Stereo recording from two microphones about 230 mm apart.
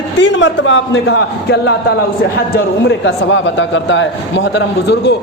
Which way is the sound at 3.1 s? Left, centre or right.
Left.